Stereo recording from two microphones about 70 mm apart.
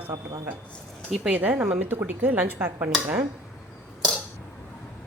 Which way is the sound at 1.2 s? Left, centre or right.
Right.